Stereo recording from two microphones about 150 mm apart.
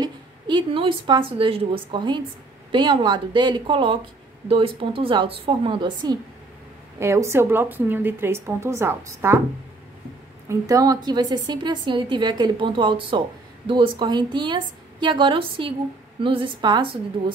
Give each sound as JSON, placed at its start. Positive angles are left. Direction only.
{"t": 0.0, "sound": "a woman's voice", "side_deg": -30}
{"t": 7.0, "sound": "a woman's voice", "side_deg": -20}
{"t": 10.5, "sound": "a woman's voice", "side_deg": -25}